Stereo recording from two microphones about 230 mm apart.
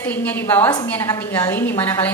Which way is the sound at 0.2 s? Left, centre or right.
Centre.